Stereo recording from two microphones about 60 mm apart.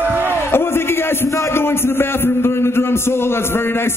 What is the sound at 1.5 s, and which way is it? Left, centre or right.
A man's voice, left.